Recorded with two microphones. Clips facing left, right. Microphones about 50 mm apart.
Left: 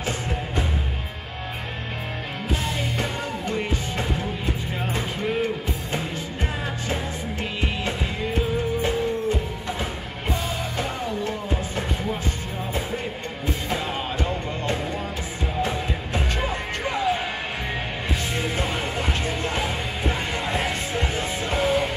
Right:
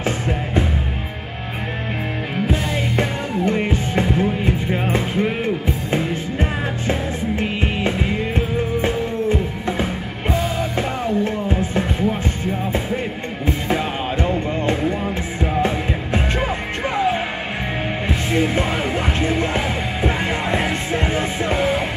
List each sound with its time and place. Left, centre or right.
3.0 s music: right
10.8 s music: right
13.5 s music: right
16.8 s music: right
18.3 s music: right